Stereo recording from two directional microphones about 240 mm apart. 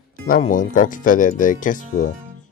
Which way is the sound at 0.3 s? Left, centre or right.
Left.